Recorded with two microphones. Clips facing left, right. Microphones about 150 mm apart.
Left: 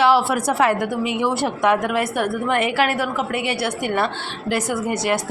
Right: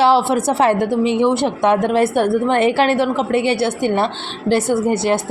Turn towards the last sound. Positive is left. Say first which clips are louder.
# right 5 dB
turn(degrees=-30)  # may be behind; listen again after turning